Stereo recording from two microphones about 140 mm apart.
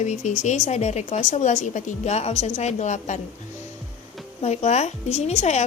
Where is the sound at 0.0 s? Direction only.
55° left (ahead or behind).